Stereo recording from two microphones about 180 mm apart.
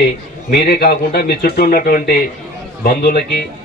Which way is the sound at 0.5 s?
60° left (ahead or behind).